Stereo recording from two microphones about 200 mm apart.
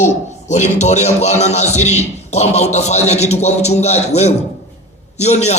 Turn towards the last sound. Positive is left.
turn(degrees=35)  # may be behind; listen again after turning